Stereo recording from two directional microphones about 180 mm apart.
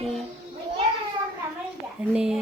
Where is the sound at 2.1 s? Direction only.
5° right (ahead or behind).